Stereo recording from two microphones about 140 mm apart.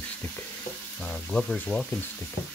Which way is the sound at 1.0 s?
5° left (ahead or behind).